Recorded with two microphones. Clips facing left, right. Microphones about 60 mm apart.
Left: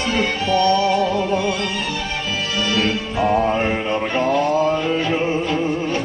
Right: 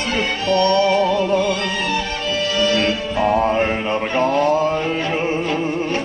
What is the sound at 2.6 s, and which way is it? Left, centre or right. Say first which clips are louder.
Music: right 1 dB; right.